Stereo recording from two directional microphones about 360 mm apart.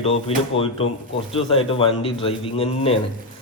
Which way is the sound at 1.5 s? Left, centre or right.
Centre.